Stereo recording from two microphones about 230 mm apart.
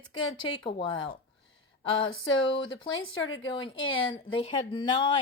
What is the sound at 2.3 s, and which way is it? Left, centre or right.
Speech, left.